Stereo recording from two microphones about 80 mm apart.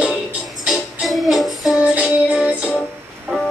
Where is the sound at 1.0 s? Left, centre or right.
Centre.